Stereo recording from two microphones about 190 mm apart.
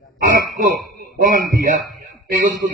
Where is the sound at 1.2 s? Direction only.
45° right (ahead or behind).